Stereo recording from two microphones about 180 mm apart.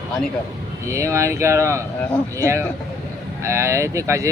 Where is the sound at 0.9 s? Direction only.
15° right (ahead or behind).